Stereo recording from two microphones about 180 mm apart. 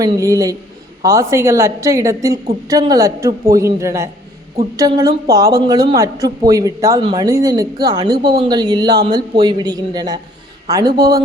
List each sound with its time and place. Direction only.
0.0 s a woman's voice: 20° right (ahead or behind)